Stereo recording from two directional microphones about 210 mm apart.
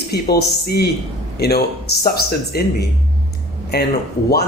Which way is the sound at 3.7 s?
50° left (ahead or behind).